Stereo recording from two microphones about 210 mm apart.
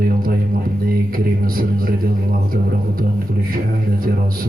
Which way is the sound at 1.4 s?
45° right (ahead or behind).